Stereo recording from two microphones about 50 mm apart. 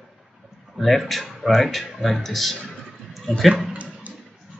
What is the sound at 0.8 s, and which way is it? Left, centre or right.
Speech, centre.